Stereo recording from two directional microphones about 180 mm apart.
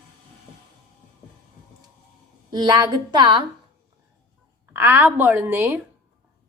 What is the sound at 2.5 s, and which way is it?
Speech, 25° right (ahead or behind).